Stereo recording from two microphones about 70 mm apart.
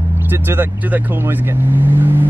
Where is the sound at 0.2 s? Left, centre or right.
Right.